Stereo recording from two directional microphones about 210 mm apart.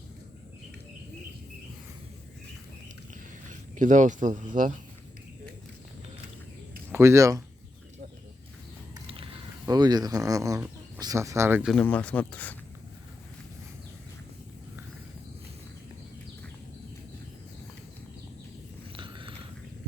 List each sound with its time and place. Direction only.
3.5 s speech: 35° right (ahead or behind)
6.9 s speech: 15° right (ahead or behind)
9.0 s a sound: 25° right (ahead or behind)
11.0 s speech: 15° right (ahead or behind)
11.7 s speech: 5° left (ahead or behind)
18.9 s biting: 25° right (ahead or behind)